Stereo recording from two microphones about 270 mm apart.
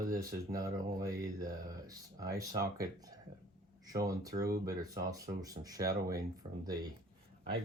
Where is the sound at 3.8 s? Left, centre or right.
Centre.